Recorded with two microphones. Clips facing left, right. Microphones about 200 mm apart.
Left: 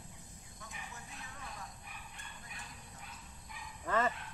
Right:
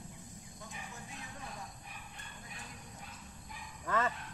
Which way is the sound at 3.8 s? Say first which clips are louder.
Left 1 dB; 20° left (ahead or behind).